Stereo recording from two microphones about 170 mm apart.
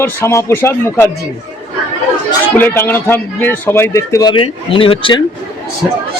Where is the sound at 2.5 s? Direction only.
15° left (ahead or behind); by 5.2 s 30° left (ahead or behind).